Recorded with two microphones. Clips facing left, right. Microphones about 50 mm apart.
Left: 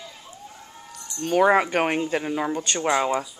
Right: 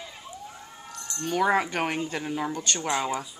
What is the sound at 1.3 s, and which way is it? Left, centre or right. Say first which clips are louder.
Speech: left 5 dB; left.